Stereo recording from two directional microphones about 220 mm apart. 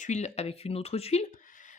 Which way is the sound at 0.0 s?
30° left (ahead or behind).